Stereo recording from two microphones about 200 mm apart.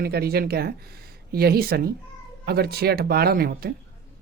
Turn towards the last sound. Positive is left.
turn(degrees=-50)  # may be behind; listen again after turning